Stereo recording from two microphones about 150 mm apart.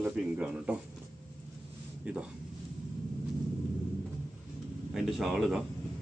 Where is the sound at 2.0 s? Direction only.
10° right (ahead or behind).